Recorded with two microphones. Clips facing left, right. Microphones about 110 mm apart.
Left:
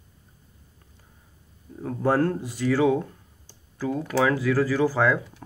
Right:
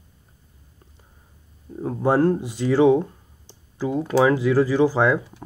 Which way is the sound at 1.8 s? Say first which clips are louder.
Right 3 dB; 20° right (ahead or behind).